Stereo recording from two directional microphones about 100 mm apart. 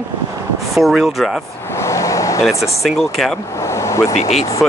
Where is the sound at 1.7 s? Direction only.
30° left (ahead or behind).